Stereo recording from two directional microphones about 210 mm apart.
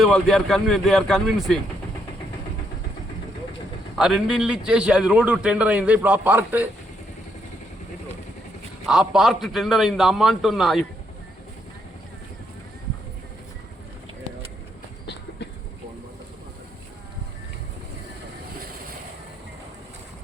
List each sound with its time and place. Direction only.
0.0 s a man's voice: centre (ahead or behind)
3.9 s a man's voice: centre (ahead or behind)
8.9 s a man's voice: centre (ahead or behind)
15.0 s train: 55° left (ahead or behind)